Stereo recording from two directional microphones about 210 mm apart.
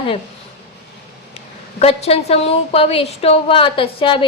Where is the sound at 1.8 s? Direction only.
30° left (ahead or behind).